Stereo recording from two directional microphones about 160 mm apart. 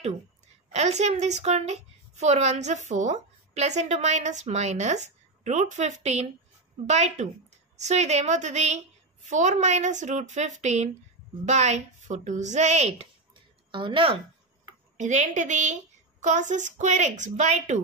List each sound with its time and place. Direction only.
0.7 s a woman's voice: 45° right (ahead or behind)
15.0 s a woman's voice: 50° right (ahead or behind)